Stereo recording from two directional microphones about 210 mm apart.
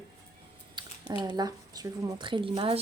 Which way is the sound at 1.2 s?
20° right (ahead or behind).